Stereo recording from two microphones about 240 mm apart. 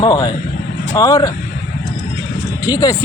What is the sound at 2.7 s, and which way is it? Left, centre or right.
Speech, centre.